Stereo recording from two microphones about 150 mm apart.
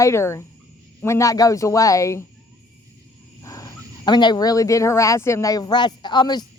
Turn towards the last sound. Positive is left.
turn(degrees=30)  # may be behind; listen again after turning